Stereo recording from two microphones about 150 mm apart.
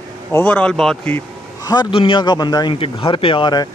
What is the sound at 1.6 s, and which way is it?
A man's voice, 25° left (ahead or behind).